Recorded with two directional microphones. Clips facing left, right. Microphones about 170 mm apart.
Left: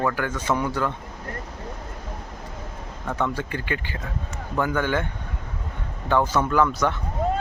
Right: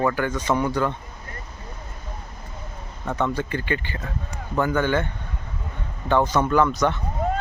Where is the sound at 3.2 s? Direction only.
5° left (ahead or behind).